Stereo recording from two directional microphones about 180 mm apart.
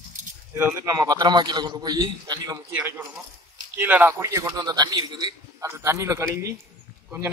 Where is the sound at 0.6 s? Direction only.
15° right (ahead or behind).